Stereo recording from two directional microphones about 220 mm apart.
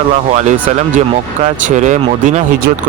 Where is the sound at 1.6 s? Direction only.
35° right (ahead or behind).